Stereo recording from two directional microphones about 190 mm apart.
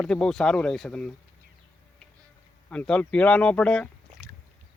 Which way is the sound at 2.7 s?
5° left (ahead or behind).